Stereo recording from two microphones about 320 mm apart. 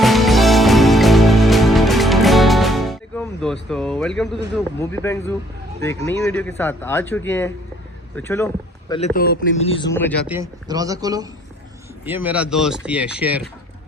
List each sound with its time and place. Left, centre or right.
0.0 s music: centre
4.5 s a man's voice: centre
8.9 s a man's voice: centre
10.3 s speech: centre